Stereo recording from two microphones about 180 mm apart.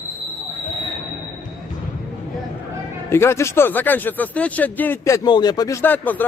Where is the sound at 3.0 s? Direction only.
15° left (ahead or behind).